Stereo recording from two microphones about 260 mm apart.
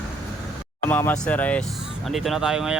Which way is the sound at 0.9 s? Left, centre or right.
Centre.